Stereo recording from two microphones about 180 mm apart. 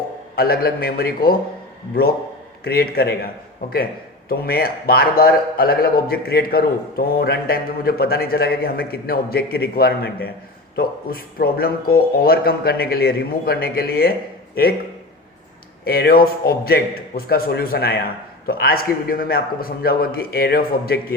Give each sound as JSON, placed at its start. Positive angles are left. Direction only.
{"t": 0.3, "sound": "a man's voice", "side_deg": 60}
{"t": 2.6, "sound": "a man's voice", "side_deg": 60}
{"t": 15.8, "sound": "a man's voice", "side_deg": 60}